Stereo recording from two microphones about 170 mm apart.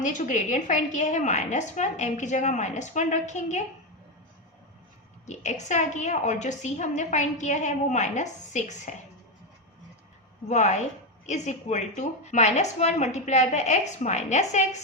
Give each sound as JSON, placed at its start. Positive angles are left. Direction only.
{"t": 0.0, "sound": "a woman's voice", "side_deg": 45}
{"t": 5.2, "sound": "a woman's voice", "side_deg": 45}
{"t": 10.5, "sound": "a woman's voice", "side_deg": 45}